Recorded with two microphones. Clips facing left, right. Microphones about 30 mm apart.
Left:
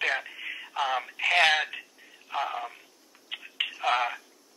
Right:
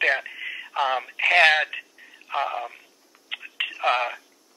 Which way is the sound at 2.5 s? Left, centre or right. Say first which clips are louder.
Right 4 dB; centre.